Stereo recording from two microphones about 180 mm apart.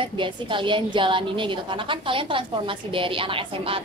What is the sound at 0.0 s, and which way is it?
A woman's voice, 25° right (ahead or behind).